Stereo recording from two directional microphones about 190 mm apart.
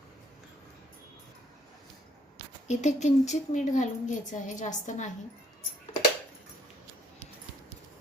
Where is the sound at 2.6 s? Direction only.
35° left (ahead or behind).